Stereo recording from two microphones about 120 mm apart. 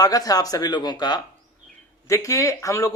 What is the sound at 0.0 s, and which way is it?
Speech, 30° left (ahead or behind).